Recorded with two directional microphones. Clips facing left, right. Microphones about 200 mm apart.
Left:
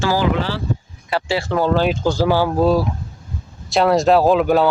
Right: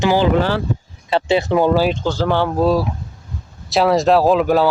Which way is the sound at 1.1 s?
25° right (ahead or behind).